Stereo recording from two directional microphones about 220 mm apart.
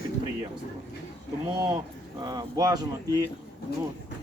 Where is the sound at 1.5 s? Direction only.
20° right (ahead or behind).